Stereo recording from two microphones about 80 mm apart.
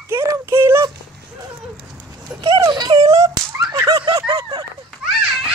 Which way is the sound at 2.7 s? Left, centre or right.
Right.